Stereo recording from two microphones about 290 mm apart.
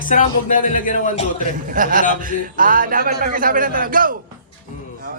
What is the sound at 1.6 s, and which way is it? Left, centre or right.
A man's voice, right.